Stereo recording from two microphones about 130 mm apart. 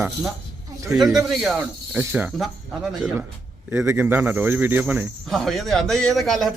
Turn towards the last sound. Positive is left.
turn(degrees=0)  # may be behind; listen again after turning